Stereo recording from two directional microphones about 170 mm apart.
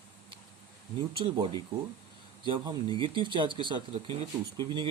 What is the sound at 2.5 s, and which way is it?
Speech, 30° right (ahead or behind).